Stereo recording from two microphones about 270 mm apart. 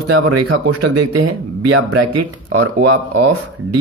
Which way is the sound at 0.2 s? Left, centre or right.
Right.